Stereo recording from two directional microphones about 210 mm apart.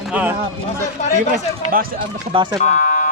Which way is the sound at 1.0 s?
35° left (ahead or behind).